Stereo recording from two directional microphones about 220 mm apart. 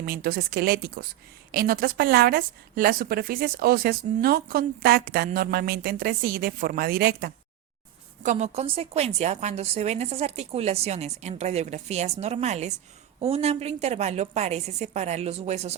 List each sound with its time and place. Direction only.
0.0 s a woman's voice: 45° right (ahead or behind)
8.2 s a woman's voice: 30° right (ahead or behind)